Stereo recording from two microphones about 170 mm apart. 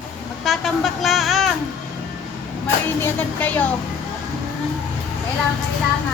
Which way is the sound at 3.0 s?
10° left (ahead or behind).